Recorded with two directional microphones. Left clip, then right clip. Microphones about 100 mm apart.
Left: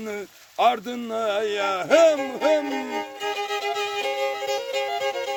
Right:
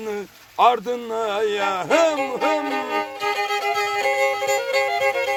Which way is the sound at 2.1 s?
30° right (ahead or behind).